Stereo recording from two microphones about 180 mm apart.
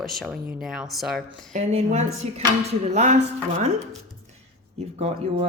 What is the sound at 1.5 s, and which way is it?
Speech, 40° right (ahead or behind).